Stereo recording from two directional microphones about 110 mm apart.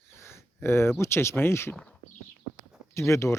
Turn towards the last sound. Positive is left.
turn(degrees=25)  # may be behind; listen again after turning